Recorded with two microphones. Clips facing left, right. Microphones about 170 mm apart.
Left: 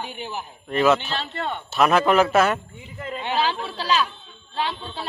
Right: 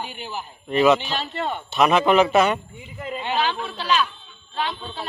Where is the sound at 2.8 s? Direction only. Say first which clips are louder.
Right 1 dB; 15° right (ahead or behind).